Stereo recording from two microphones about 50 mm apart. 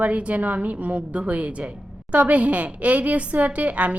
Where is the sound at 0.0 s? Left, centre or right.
Right.